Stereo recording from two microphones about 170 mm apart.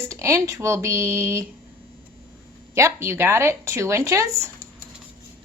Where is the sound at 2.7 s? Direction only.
15° right (ahead or behind).